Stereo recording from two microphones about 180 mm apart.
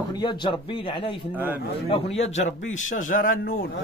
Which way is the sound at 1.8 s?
35° left (ahead or behind).